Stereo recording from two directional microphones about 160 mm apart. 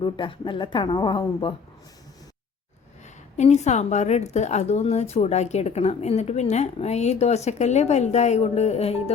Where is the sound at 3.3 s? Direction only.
45° left (ahead or behind).